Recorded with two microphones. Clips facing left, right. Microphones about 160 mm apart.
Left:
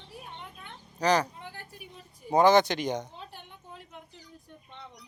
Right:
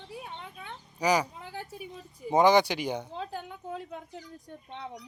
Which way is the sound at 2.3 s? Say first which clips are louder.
Left 1 dB; 15° right (ahead or behind).